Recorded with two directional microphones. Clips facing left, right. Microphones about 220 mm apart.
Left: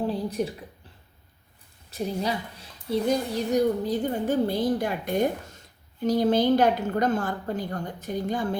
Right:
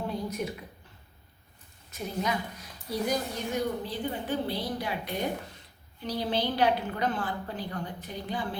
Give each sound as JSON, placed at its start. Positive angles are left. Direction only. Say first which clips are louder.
{"t": 0.0, "sound": "a sound", "louder": "left 6 dB", "side_deg": 30}
{"t": 1.9, "sound": "speech", "louder": "left 4 dB", "side_deg": 35}
{"t": 3.5, "sound": "a woman's voice", "louder": "left 9 dB", "side_deg": 45}